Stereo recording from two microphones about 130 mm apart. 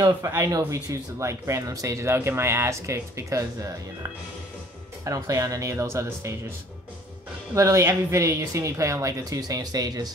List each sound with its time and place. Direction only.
0.0 s speech: 20° right (ahead or behind)
5.0 s speech: 25° right (ahead or behind)
7.5 s speech: 25° right (ahead or behind)